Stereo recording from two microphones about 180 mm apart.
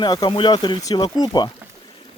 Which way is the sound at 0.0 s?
25° left (ahead or behind).